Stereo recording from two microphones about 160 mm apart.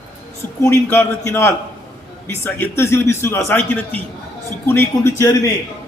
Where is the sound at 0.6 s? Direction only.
15° left (ahead or behind).